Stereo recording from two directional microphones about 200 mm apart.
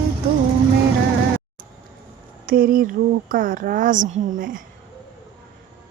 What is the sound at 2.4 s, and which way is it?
Speech, 45° right (ahead or behind).